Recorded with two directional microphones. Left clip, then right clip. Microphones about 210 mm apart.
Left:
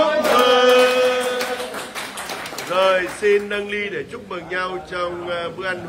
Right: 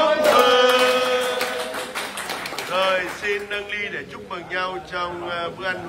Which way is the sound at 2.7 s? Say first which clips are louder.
Left 4 dB; 5° right (ahead or behind).